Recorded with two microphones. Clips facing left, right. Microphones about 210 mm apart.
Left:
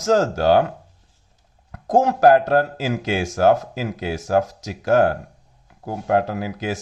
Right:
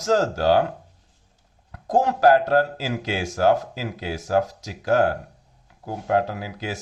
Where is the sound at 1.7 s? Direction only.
45° left (ahead or behind).